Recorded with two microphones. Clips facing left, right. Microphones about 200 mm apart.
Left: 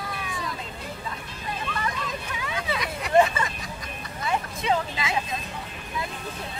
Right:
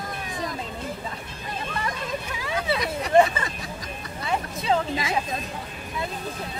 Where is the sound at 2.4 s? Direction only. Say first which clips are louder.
Right 4 dB; 35° right (ahead or behind).